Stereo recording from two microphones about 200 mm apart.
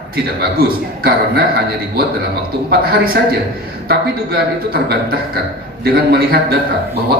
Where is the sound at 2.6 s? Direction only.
50° right (ahead or behind).